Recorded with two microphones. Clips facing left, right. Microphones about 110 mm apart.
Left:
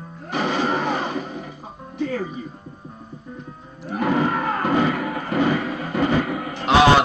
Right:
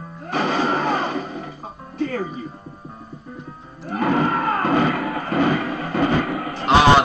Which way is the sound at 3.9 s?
45° right (ahead or behind).